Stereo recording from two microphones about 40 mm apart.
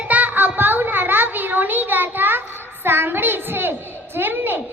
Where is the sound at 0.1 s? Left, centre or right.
Right.